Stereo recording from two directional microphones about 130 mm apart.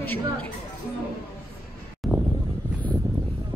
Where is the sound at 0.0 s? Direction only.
15° left (ahead or behind).